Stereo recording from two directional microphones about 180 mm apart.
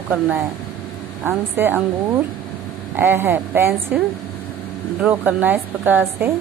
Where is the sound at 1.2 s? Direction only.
10° right (ahead or behind).